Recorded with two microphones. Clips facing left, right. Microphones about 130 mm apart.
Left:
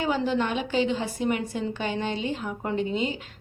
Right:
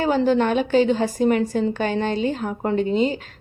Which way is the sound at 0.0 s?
40° right (ahead or behind).